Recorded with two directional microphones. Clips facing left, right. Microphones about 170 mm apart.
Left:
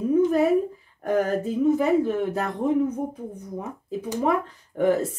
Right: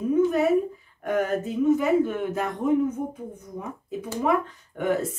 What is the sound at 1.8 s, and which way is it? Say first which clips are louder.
Speech: left 1 dB; 35° left (ahead or behind).